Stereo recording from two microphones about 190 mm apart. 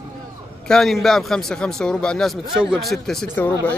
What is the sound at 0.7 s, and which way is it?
A man's voice, centre (ahead or behind).